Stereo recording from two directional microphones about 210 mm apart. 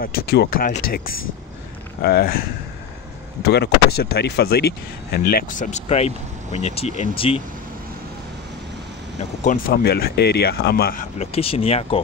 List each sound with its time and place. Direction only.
0.0 s speech: 45° left (ahead or behind)
3.4 s speech: 50° left (ahead or behind); by 7.4 s 25° left (ahead or behind)
9.4 s speech: 40° left (ahead or behind)